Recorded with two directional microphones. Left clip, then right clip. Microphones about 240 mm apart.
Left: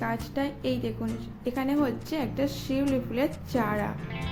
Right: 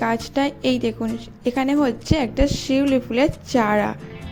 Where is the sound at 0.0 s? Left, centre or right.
Right.